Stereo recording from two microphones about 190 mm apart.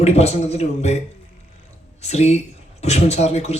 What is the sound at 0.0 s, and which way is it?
Speech, 35° left (ahead or behind).